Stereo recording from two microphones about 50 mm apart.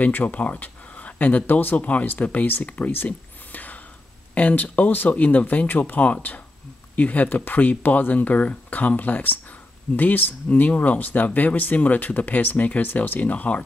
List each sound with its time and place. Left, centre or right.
0.0 s speech: left
3.1 s a sound: left
4.4 s speech: left